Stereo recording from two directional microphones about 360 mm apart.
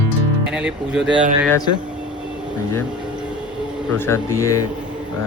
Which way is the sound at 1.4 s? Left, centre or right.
Centre.